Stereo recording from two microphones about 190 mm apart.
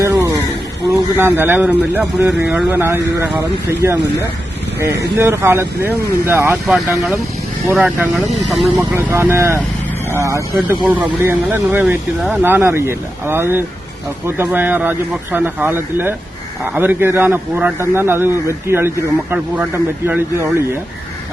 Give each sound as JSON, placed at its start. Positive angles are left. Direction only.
{"t": 0.0, "sound": "a sound", "side_deg": -15}
{"t": 0.9, "sound": "speech", "side_deg": -15}
{"t": 20.1, "sound": "speech", "side_deg": -10}